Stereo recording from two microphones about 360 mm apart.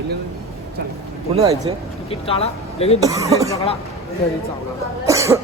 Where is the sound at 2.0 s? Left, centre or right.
Centre.